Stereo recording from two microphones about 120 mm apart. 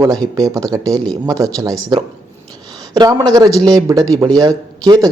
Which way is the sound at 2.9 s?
30° right (ahead or behind).